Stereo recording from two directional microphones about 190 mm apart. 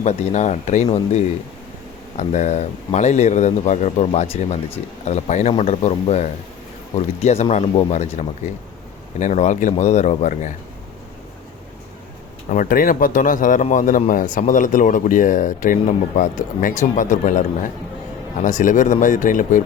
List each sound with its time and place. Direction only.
0.0 s a man's voice: 35° left (ahead or behind)
12.5 s a man's voice: 45° left (ahead or behind)